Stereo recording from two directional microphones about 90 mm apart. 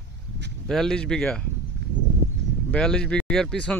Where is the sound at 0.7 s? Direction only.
5° left (ahead or behind).